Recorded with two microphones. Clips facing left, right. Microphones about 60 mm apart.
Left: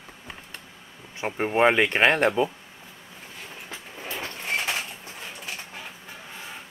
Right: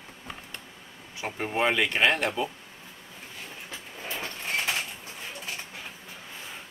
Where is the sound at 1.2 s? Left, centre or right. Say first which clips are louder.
Left 6 dB; left.